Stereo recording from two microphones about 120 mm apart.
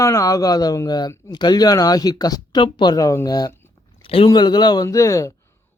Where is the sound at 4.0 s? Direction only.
50° left (ahead or behind).